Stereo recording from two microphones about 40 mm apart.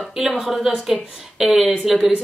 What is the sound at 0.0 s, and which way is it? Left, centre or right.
A woman's voice, centre.